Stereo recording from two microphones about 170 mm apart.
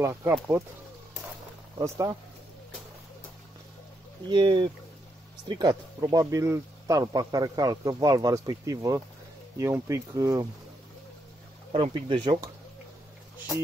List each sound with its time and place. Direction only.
0.0 s speech: 15° right (ahead or behind)
1.8 s speech: 25° right (ahead or behind)
4.3 s speech: 30° right (ahead or behind)
11.7 s speech: 30° right (ahead or behind)